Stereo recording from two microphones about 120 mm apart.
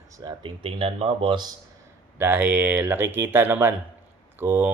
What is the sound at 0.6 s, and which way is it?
Speech, 55° right (ahead or behind).